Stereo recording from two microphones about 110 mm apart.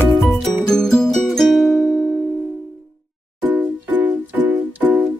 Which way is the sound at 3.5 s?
15° right (ahead or behind).